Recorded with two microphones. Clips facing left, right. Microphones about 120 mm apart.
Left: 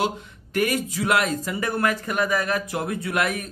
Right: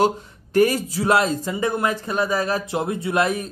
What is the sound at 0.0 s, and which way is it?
Speech, 35° right (ahead or behind).